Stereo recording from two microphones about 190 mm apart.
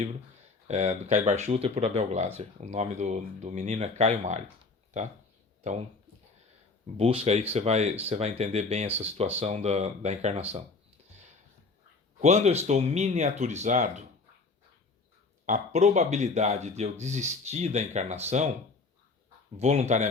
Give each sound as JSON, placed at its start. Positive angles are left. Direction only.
{"t": 0.7, "sound": "speech", "side_deg": -35}
{"t": 5.6, "sound": "speech", "side_deg": -35}
{"t": 6.9, "sound": "speech", "side_deg": -35}
{"t": 12.2, "sound": "speech", "side_deg": -35}
{"t": 15.4, "sound": "speech", "side_deg": -40}
{"t": 19.5, "sound": "speech", "side_deg": -35}